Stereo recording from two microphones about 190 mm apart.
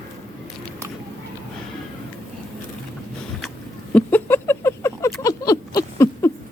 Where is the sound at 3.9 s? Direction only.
10° left (ahead or behind).